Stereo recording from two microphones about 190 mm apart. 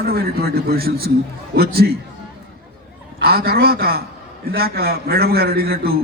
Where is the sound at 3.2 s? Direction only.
55° right (ahead or behind).